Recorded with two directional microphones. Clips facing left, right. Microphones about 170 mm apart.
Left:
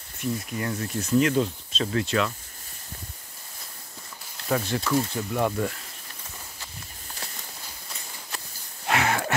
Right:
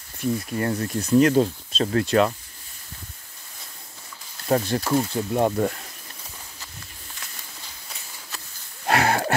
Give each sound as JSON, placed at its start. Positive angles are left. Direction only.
{"t": 0.2, "sound": "speech", "side_deg": -40}
{"t": 4.5, "sound": "speech", "side_deg": -40}
{"t": 8.8, "sound": "a sound", "side_deg": -40}